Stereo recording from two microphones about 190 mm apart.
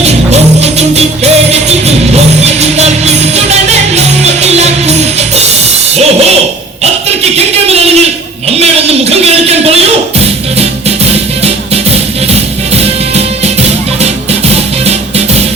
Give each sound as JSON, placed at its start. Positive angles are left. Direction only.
{"t": 0.0, "sound": "music", "side_deg": -35}
{"t": 7.3, "sound": "music", "side_deg": -35}
{"t": 8.5, "sound": "a sound", "side_deg": -35}
{"t": 12.3, "sound": "music", "side_deg": -35}